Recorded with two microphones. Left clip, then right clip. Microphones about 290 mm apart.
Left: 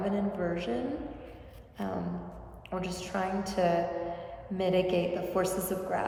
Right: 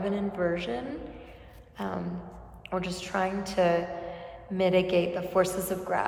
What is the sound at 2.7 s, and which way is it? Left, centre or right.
A woman's voice, centre.